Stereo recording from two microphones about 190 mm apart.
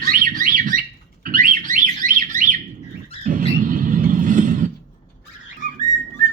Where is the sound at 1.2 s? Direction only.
45° right (ahead or behind).